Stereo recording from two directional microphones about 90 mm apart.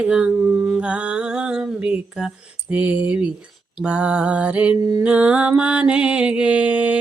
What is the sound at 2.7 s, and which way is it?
Mantra, 15° right (ahead or behind).